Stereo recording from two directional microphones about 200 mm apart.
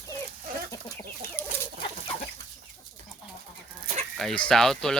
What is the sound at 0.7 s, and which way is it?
Chicken, 15° left (ahead or behind).